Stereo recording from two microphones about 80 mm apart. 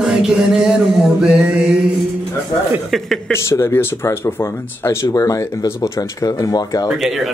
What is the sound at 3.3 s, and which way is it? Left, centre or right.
Speech, left.